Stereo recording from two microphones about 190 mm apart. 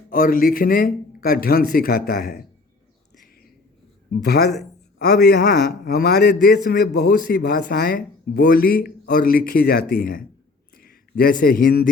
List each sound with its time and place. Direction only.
0.1 s speech: 45° left (ahead or behind)
4.2 s a man's voice: 60° left (ahead or behind)